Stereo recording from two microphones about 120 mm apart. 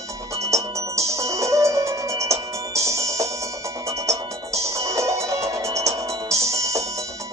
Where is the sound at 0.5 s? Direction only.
25° right (ahead or behind).